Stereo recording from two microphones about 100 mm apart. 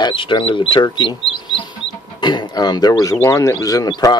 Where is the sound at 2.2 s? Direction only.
50° left (ahead or behind).